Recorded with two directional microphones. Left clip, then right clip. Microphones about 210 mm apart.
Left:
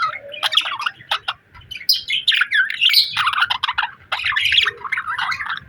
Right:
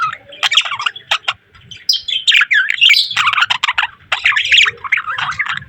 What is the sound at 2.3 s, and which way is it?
Bird, 20° right (ahead or behind).